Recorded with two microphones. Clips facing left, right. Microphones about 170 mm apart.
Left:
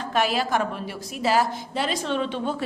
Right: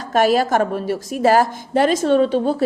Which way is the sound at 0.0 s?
45° right (ahead or behind).